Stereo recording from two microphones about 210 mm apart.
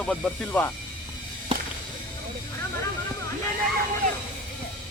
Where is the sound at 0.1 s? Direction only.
10° left (ahead or behind).